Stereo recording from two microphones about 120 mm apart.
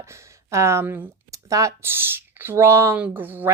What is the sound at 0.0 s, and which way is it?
Speech, 25° right (ahead or behind).